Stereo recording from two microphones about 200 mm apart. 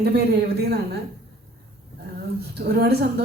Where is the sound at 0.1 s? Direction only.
55° right (ahead or behind).